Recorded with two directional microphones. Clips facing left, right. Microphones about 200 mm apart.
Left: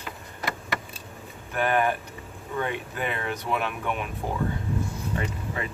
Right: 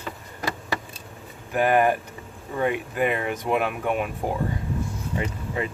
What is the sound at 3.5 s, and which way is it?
Speech, 45° right (ahead or behind).